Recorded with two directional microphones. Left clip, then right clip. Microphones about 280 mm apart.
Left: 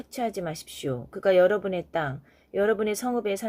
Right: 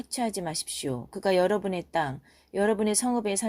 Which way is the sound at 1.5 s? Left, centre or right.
Right.